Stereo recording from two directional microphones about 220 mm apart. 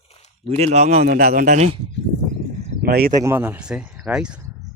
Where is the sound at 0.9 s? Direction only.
45° right (ahead or behind).